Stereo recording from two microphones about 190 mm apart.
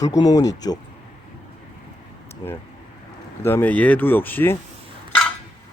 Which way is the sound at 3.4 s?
10° left (ahead or behind).